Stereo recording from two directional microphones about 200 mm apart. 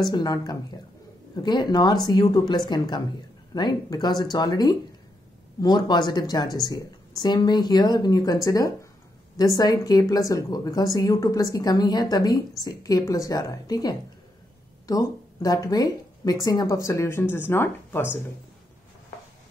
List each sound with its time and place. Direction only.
0.1 s a woman's voice: 20° left (ahead or behind)